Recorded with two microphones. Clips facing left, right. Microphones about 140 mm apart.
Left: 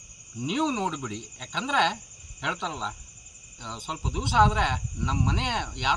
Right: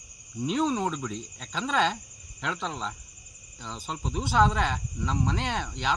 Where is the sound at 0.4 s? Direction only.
Centre (ahead or behind).